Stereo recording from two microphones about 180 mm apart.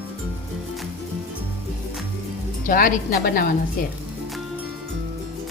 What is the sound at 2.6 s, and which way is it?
Speech, 50° left (ahead or behind).